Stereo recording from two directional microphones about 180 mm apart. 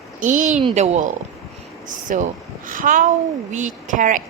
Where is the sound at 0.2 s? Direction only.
45° right (ahead or behind).